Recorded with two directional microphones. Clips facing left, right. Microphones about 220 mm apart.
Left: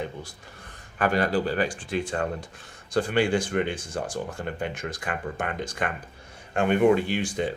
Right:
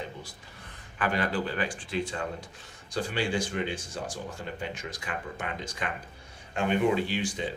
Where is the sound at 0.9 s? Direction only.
40° left (ahead or behind).